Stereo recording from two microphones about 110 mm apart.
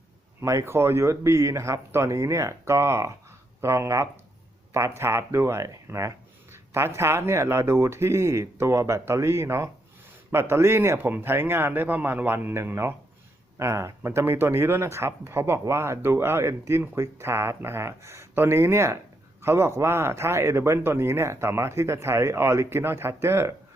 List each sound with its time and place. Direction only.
0.4 s speech: 25° right (ahead or behind)